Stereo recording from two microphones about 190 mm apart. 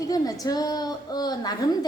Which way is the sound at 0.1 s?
20° left (ahead or behind).